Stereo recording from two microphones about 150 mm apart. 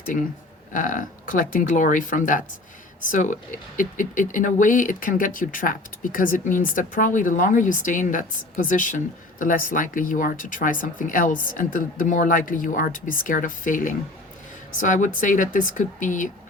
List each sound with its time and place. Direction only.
0.0 s speech: 60° left (ahead or behind)